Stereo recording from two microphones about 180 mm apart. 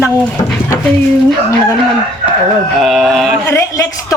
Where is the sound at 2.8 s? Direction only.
Centre (ahead or behind).